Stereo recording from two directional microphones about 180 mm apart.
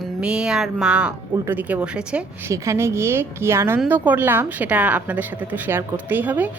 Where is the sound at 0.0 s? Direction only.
5° right (ahead or behind).